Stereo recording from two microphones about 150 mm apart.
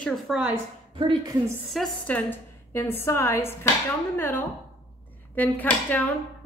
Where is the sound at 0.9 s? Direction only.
35° right (ahead or behind).